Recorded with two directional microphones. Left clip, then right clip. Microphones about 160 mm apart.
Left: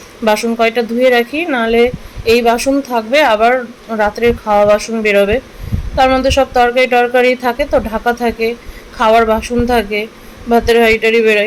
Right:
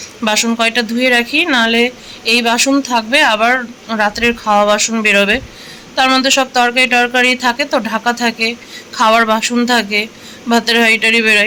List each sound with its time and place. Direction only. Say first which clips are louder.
0.3 s speech: left 2 dB; 10° left (ahead or behind)